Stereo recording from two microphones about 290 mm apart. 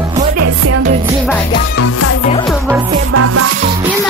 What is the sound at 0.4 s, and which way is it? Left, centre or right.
Music, right.